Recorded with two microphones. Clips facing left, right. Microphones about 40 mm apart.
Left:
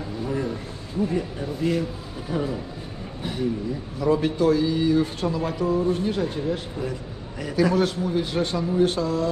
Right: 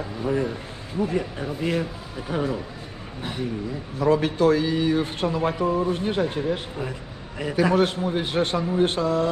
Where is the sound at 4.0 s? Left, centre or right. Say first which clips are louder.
Right 1 dB; right.